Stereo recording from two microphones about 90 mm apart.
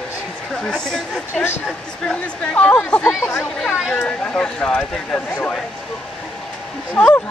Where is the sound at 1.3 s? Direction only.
25° left (ahead or behind).